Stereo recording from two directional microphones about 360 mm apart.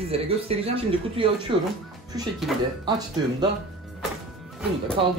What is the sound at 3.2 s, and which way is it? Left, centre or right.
Speech, centre.